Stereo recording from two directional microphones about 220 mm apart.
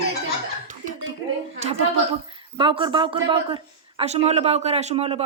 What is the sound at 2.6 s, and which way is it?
Speech, 20° right (ahead or behind).